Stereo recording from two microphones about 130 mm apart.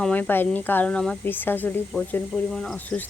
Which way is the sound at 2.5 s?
5° left (ahead or behind).